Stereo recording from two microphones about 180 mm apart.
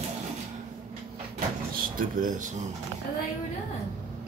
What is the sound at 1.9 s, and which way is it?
Speech, 45° right (ahead or behind).